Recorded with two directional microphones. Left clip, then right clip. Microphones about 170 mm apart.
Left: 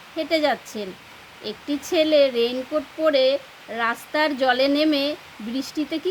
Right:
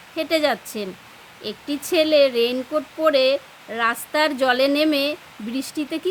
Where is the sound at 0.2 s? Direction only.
15° right (ahead or behind).